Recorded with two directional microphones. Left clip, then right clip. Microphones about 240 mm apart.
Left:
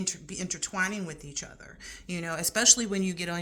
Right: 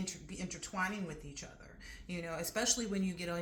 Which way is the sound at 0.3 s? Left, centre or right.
Left.